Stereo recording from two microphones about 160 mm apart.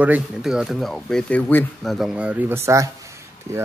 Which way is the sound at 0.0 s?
5° right (ahead or behind).